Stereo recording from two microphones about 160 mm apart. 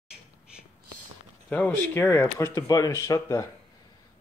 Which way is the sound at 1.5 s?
10° left (ahead or behind).